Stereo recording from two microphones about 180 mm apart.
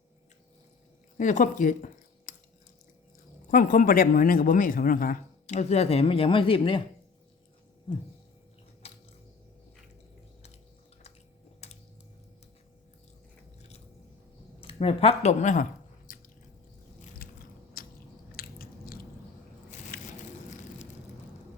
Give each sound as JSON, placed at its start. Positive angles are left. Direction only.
{"t": 1.2, "sound": "speech", "side_deg": 45}
{"t": 3.5, "sound": "a man's voice", "side_deg": 50}
{"t": 8.8, "sound": "a sound", "side_deg": 35}
{"t": 11.6, "sound": "a sound", "side_deg": 35}
{"t": 13.6, "sound": "biting", "side_deg": 35}
{"t": 14.6, "sound": "speech", "side_deg": 30}
{"t": 16.1, "sound": "squish", "side_deg": 50}
{"t": 17.2, "sound": "biting", "side_deg": 55}